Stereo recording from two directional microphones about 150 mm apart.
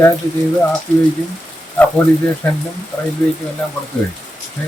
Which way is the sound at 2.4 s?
10° left (ahead or behind).